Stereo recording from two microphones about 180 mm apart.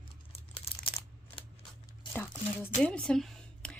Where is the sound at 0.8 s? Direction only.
30° left (ahead or behind).